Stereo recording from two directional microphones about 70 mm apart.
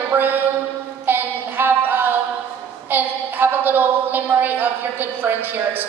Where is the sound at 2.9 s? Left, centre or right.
Right.